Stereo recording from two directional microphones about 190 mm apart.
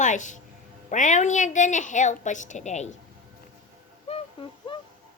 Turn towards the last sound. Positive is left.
turn(degrees=30)  # may be behind; listen again after turning